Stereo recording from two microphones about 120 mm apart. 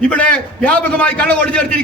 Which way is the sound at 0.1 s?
10° left (ahead or behind).